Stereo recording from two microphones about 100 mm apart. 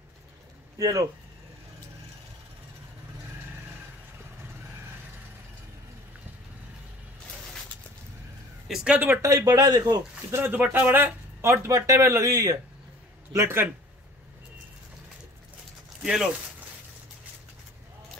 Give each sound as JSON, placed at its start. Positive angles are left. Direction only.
{"t": 0.7, "sound": "speech", "side_deg": -35}
{"t": 8.6, "sound": "speech", "side_deg": -5}
{"t": 8.9, "sound": "speech", "side_deg": -20}
{"t": 9.2, "sound": "speech", "side_deg": -35}
{"t": 10.3, "sound": "speech", "side_deg": -20}
{"t": 16.0, "sound": "speech", "side_deg": -5}